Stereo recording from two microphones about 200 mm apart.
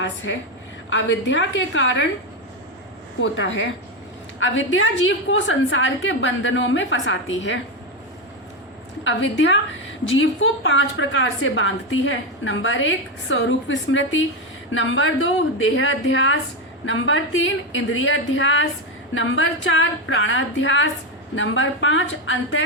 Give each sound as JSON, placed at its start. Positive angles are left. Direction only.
{"t": 0.9, "sound": "a woman's voice", "side_deg": 65}
{"t": 3.2, "sound": "a woman's voice", "side_deg": 70}
{"t": 9.0, "sound": "a woman's voice", "side_deg": 70}